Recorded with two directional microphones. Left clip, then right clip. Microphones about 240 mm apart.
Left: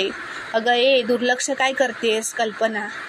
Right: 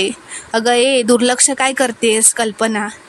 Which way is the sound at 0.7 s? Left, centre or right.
Right.